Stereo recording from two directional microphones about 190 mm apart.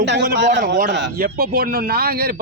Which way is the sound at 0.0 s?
60° right (ahead or behind).